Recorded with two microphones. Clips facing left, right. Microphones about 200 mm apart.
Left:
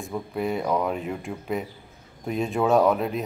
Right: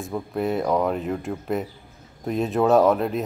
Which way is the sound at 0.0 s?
Centre (ahead or behind).